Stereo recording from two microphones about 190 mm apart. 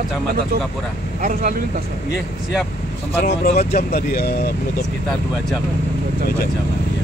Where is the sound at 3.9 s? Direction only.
50° left (ahead or behind).